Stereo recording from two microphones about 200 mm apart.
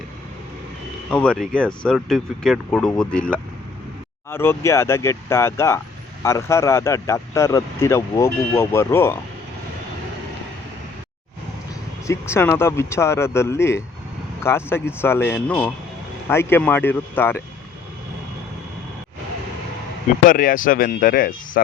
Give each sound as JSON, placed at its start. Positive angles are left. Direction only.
{"t": 1.1, "sound": "speech", "side_deg": 5}
{"t": 12.0, "sound": "speech", "side_deg": 15}
{"t": 20.2, "sound": "speech", "side_deg": 45}